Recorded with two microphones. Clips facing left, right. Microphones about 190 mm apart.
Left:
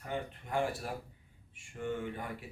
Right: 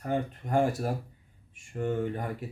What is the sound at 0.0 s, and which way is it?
Speech, 45° right (ahead or behind).